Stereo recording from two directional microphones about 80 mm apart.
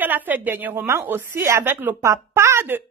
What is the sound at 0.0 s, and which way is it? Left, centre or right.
Speech, right.